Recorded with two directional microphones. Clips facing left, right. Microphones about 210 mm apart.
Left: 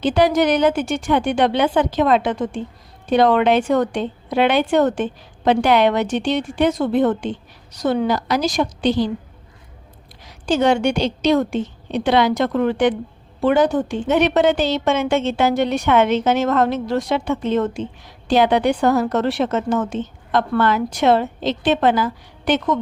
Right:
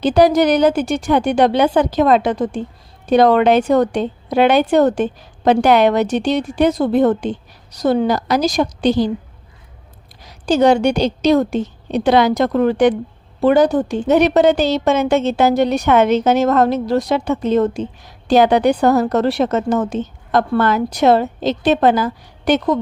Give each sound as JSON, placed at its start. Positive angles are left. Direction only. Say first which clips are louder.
{"t": 0.0, "sound": "a woman's voice", "louder": "right 4 dB", "side_deg": -40}
{"t": 10.2, "sound": "a woman's voice", "louder": "right 4 dB", "side_deg": -40}